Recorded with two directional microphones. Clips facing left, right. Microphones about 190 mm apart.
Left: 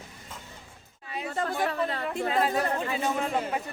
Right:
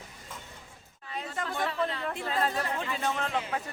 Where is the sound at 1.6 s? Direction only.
55° left (ahead or behind).